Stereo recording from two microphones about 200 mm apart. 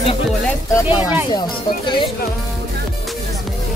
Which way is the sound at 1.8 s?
25° left (ahead or behind).